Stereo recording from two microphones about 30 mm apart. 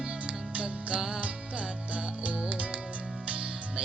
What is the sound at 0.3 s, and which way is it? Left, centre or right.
Music, right.